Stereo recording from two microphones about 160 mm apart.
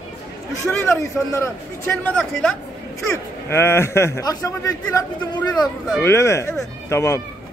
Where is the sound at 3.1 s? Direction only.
15° left (ahead or behind).